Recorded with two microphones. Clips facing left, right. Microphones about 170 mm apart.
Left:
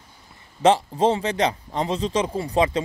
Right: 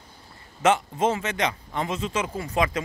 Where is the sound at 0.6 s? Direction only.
30° left (ahead or behind).